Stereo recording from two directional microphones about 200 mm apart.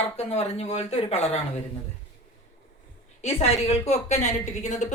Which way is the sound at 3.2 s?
30° left (ahead or behind).